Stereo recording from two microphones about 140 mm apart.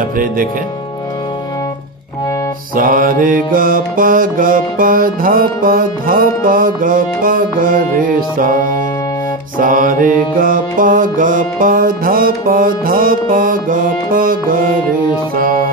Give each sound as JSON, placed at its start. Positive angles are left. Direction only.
{"t": 2.7, "sound": "mantra", "side_deg": -90}
{"t": 9.6, "sound": "mantra", "side_deg": -85}
{"t": 15.3, "sound": "music", "side_deg": -90}